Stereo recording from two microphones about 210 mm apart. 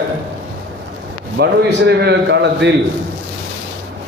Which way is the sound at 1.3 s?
55° right (ahead or behind).